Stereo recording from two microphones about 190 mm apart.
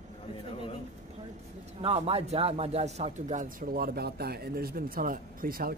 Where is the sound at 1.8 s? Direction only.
30° right (ahead or behind).